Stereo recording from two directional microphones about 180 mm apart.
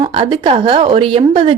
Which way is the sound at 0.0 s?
25° right (ahead or behind).